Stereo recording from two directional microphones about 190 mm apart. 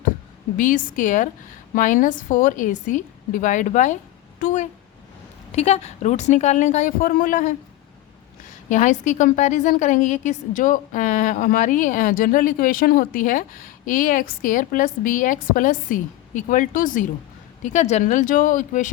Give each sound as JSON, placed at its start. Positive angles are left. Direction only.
{"t": 0.5, "sound": "a woman's voice", "side_deg": 45}
{"t": 8.7, "sound": "a woman's voice", "side_deg": 40}